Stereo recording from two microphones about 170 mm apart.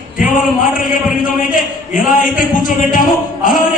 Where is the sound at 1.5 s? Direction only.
50° left (ahead or behind).